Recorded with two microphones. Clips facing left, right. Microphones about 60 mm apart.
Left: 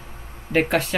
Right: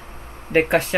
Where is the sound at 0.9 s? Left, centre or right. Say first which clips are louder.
Right 4 dB; centre.